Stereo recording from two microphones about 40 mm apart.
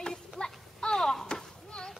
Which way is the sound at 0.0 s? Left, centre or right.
Centre.